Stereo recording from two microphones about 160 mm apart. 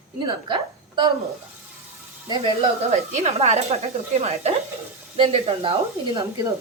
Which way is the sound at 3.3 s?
40° right (ahead or behind).